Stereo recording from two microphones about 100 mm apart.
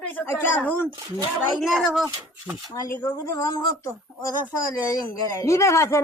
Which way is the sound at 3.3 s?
30° left (ahead or behind).